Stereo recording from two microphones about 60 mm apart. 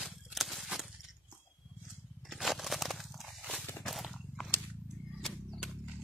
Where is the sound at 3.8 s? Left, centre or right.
Centre.